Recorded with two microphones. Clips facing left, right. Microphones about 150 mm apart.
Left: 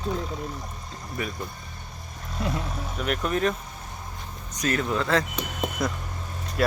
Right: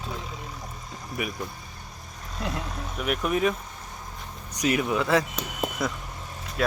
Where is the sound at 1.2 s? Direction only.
10° right (ahead or behind).